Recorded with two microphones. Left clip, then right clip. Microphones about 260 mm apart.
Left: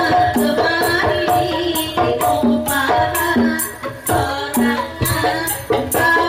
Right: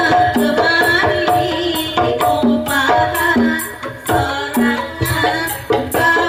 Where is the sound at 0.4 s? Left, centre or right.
Centre.